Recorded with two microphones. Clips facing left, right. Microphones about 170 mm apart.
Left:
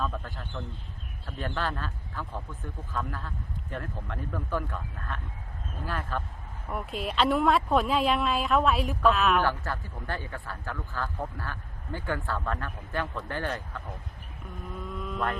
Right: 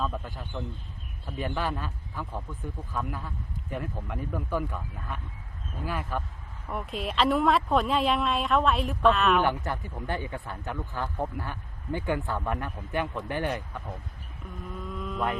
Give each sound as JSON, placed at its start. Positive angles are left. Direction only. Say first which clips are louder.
{"t": 0.0, "sound": "speech", "louder": "right 1 dB", "side_deg": -10}
{"t": 6.7, "sound": "speech", "louder": "even", "side_deg": 0}
{"t": 9.4, "sound": "speech", "louder": "right 2 dB", "side_deg": -20}
{"t": 14.7, "sound": "speech", "louder": "even", "side_deg": 0}